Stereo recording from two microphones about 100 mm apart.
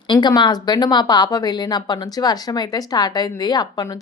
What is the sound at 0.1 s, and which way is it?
A woman's voice, 50° left (ahead or behind).